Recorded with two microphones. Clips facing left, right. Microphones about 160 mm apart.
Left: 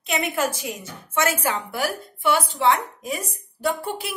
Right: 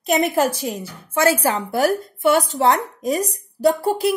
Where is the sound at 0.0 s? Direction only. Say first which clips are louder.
Right 6 dB; 40° right (ahead or behind).